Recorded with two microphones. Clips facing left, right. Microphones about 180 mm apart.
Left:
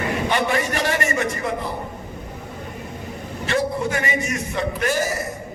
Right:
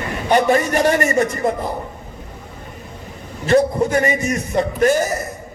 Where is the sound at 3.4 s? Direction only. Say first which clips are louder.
Right 7 dB; 40° right (ahead or behind).